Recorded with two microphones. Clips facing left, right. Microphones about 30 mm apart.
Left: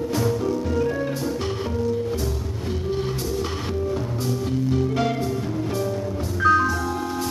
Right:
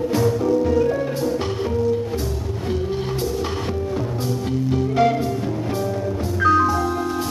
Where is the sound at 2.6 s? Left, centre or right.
Centre.